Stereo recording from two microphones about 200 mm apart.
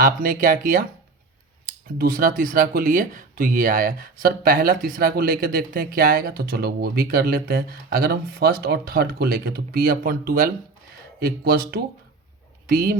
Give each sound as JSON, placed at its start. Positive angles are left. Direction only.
{"t": 0.0, "sound": "speech", "side_deg": -45}